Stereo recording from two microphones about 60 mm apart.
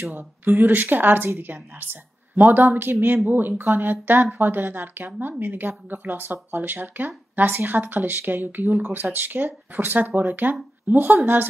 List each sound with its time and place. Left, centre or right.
0.0 s speech: right